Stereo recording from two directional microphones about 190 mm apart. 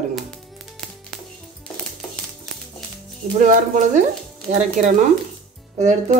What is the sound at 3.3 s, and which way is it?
Speech, 40° right (ahead or behind).